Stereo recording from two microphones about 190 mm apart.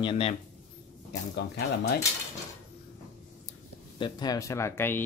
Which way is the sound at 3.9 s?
25° left (ahead or behind).